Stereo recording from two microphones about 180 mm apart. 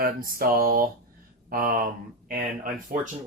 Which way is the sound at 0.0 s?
55° right (ahead or behind).